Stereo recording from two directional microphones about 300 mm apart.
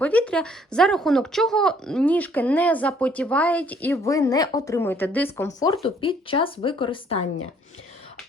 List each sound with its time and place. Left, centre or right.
0.0 s speech: centre